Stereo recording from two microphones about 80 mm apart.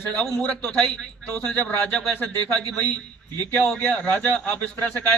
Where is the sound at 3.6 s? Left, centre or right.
Centre.